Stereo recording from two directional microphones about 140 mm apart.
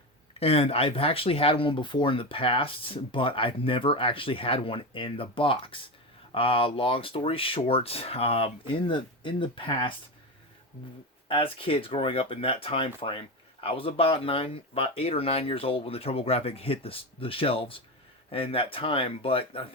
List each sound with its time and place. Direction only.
0.3 s speech: 45° left (ahead or behind)
11.3 s speech: 40° left (ahead or behind)